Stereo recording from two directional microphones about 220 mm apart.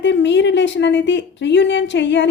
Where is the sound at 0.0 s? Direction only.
55° left (ahead or behind).